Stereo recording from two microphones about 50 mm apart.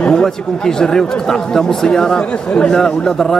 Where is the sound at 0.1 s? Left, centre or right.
Centre.